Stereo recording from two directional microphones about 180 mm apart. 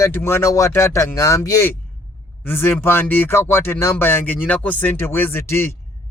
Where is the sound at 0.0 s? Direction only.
15° left (ahead or behind).